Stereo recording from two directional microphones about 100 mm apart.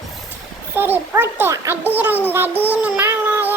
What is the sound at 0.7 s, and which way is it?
A child's voice, 20° right (ahead or behind).